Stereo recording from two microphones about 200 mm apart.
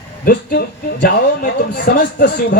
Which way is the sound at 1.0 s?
45° left (ahead or behind).